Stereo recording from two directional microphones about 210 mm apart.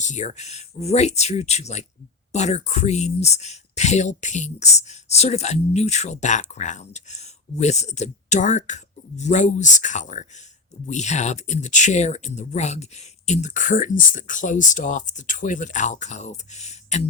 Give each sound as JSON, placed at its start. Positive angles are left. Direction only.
{"t": 0.0, "sound": "speech", "side_deg": 35}